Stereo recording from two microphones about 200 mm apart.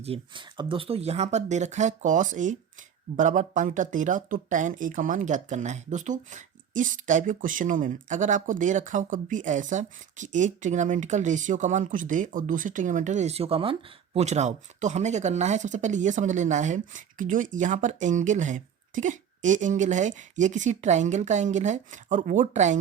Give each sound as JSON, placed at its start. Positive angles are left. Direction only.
{"t": 0.0, "sound": "speech", "side_deg": -25}